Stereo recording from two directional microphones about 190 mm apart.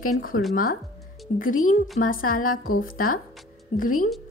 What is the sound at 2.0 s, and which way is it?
A woman's voice, 50° left (ahead or behind).